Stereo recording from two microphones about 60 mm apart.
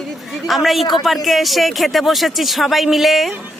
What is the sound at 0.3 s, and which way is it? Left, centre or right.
A woman's voice, centre.